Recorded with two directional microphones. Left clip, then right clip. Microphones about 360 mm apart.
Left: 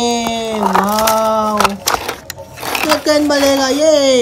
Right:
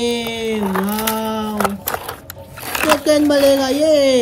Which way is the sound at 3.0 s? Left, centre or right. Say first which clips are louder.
Even; centre.